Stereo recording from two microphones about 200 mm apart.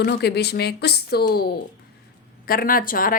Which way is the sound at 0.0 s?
55° left (ahead or behind).